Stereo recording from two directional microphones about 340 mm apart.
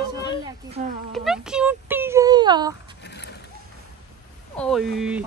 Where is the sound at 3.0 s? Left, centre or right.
Left.